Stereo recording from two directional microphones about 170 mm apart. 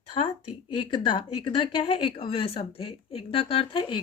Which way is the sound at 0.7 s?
30° left (ahead or behind).